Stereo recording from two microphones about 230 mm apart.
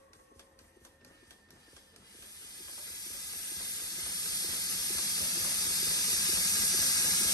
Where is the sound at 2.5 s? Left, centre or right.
Centre.